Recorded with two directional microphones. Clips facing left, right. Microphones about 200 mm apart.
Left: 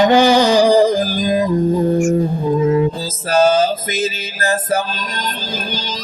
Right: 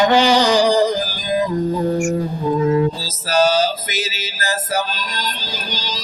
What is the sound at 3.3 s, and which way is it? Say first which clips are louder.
Music: left 3 dB; 50° left (ahead or behind).